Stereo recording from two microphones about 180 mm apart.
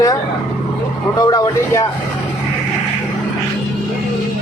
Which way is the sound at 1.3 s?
20° left (ahead or behind).